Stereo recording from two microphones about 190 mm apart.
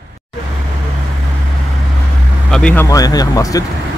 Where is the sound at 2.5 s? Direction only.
5° left (ahead or behind).